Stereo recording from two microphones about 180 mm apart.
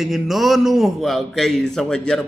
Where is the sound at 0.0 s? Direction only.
Centre (ahead or behind).